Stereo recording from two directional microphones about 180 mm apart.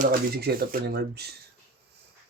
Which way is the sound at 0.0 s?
60° right (ahead or behind).